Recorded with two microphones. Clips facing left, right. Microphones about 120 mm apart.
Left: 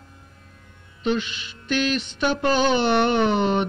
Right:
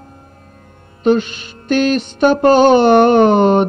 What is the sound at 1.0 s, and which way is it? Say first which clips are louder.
Mantra: right 10 dB; 45° right (ahead or behind).